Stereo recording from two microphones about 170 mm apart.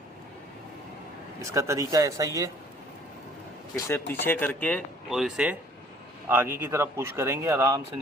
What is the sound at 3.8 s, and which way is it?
Speech, 15° left (ahead or behind).